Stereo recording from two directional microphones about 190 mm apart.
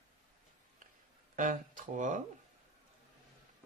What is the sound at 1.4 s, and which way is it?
Speech, 40° right (ahead or behind).